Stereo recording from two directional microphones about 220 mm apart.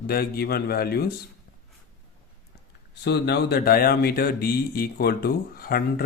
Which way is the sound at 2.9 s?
50° left (ahead or behind).